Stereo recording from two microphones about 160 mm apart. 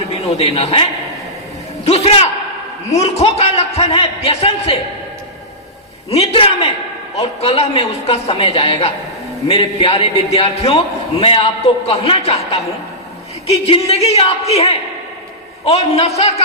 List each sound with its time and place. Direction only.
0.1 s a man's voice: 40° left (ahead or behind)
6.1 s a woman's voice: 40° left (ahead or behind)
13.5 s a woman's voice: 35° left (ahead or behind)